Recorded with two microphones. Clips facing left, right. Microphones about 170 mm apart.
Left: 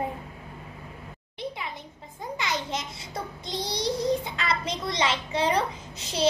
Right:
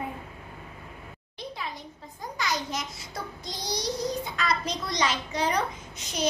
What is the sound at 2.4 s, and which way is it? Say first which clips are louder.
Child singing: right 1 dB; 25° left (ahead or behind).